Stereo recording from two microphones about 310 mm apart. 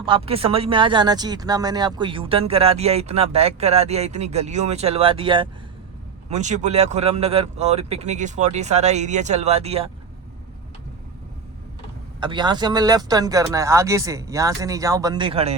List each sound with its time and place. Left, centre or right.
0.0 s speech: centre
12.2 s speech: centre